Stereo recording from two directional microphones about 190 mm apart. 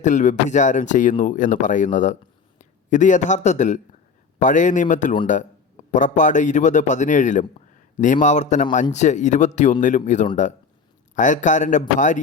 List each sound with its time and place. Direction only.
0.0 s speech: 40° left (ahead or behind)